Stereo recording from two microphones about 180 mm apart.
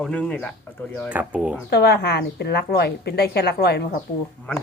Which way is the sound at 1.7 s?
65° left (ahead or behind).